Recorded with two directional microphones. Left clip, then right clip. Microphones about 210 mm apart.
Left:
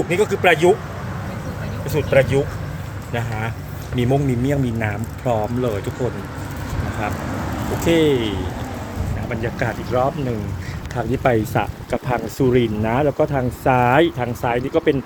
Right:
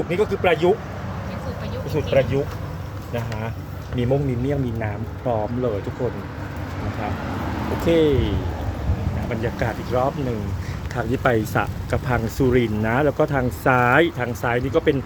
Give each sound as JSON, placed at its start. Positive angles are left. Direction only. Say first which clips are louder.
{"t": 0.1, "sound": "speech", "louder": "left 4 dB", "side_deg": 0}
{"t": 1.9, "sound": "speech", "louder": "left 4 dB", "side_deg": 0}
{"t": 7.9, "sound": "speech", "louder": "left 2 dB", "side_deg": -5}
{"t": 9.3, "sound": "speech", "louder": "left 2 dB", "side_deg": -5}